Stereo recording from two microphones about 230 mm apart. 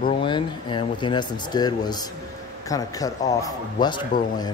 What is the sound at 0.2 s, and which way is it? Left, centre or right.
Speech, left.